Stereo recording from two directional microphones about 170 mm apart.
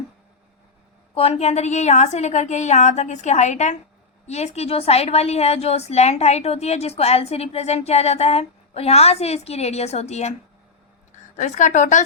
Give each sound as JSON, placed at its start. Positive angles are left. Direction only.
{"t": 1.1, "sound": "a woman's voice", "side_deg": 35}
{"t": 11.3, "sound": "a woman's voice", "side_deg": 45}